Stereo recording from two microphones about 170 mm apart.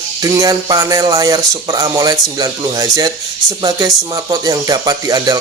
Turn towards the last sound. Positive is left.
turn(degrees=-20)  # may be behind; listen again after turning